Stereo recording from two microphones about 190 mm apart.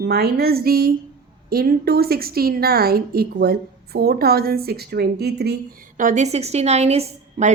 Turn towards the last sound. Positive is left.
turn(degrees=-35)  # may be behind; listen again after turning